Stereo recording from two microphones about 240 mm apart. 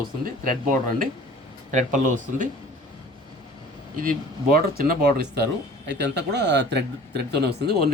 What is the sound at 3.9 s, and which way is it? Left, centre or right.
Speech, right.